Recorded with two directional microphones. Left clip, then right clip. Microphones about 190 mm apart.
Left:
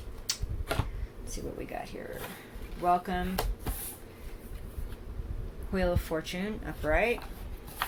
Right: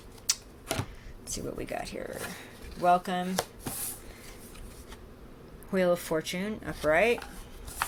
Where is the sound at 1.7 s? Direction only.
50° right (ahead or behind).